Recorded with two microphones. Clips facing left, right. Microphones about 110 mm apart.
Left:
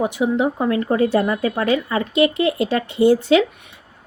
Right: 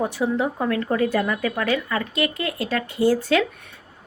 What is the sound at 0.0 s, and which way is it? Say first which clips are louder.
Speech: left 4 dB; 20° left (ahead or behind).